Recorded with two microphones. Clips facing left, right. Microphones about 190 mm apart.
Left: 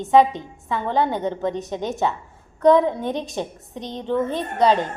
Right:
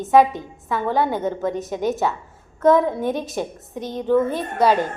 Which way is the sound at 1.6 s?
Centre (ahead or behind).